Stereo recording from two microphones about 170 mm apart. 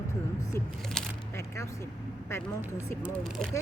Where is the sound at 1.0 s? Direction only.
5° left (ahead or behind).